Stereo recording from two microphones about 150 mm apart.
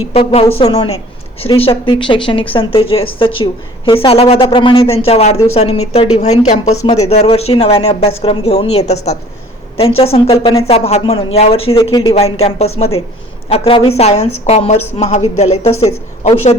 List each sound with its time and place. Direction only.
0.1 s speech: 40° left (ahead or behind)
11.8 s speech: 30° left (ahead or behind); by 16.6 s 45° left (ahead or behind)